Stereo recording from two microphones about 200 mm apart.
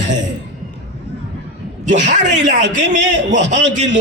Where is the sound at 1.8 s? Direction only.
40° right (ahead or behind).